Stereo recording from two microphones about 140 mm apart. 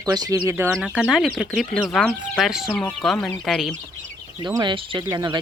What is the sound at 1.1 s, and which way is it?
Speech, centre (ahead or behind).